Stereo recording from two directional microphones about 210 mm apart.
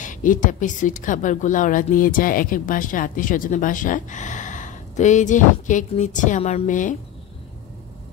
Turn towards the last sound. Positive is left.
turn(degrees=35)  # may be behind; listen again after turning